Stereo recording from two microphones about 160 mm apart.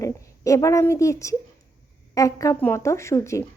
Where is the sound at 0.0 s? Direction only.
20° left (ahead or behind).